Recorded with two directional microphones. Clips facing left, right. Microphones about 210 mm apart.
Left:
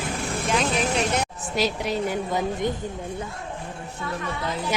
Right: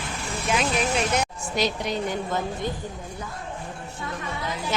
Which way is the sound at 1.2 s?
5° left (ahead or behind).